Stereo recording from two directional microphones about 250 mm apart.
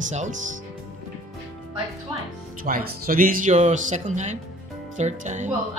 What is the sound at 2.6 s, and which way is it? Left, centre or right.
Speech, right.